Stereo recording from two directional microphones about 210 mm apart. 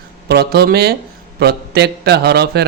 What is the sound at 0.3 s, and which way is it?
A man's voice, 50° right (ahead or behind).